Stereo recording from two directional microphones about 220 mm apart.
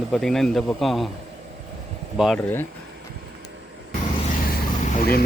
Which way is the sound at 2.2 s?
5° left (ahead or behind).